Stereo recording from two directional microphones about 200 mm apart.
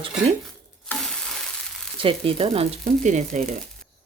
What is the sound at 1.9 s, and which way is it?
Speech, 25° right (ahead or behind).